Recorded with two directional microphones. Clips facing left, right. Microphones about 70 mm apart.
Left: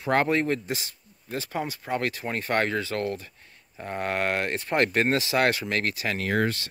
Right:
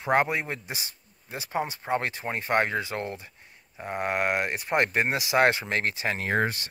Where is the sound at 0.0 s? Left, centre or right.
Centre.